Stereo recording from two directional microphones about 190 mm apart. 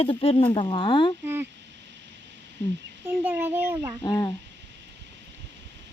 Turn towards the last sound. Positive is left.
turn(degrees=20)  # may be behind; listen again after turning